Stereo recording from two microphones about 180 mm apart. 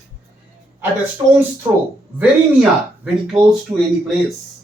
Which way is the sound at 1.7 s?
20° right (ahead or behind).